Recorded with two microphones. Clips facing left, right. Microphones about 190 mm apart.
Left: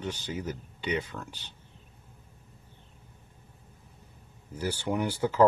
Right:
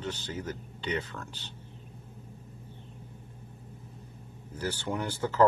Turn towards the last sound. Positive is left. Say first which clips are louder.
# left 2 dB
turn(degrees=10)  # may be behind; listen again after turning